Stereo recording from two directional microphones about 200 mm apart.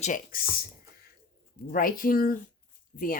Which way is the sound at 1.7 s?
45° left (ahead or behind).